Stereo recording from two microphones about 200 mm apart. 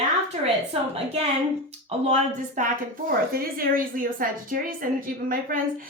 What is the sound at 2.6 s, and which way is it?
A woman's voice, 40° right (ahead or behind).